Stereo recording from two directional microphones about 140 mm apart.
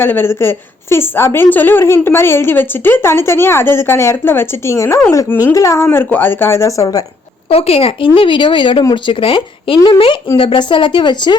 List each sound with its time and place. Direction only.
0.0 s a woman's voice: 15° left (ahead or behind)
7.5 s speech: 45° left (ahead or behind)